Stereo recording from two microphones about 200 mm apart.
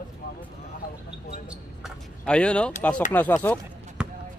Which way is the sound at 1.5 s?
Centre (ahead or behind).